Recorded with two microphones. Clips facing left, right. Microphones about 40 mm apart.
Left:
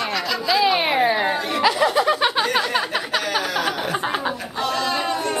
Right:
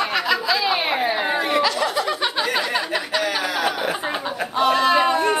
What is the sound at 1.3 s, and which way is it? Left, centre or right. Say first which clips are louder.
Chatter: right 4 dB; centre.